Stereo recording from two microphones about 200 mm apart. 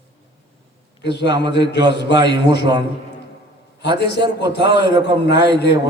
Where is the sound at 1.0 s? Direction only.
60° left (ahead or behind).